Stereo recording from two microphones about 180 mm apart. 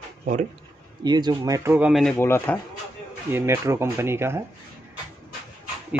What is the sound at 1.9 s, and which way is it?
Speech, centre (ahead or behind).